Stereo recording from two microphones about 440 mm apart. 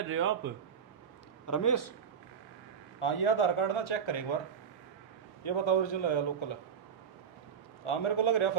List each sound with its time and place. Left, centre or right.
0.1 s a man's voice: right
1.5 s a man's voice: left
3.0 s speech: left
5.4 s a man's voice: left
7.9 s speech: left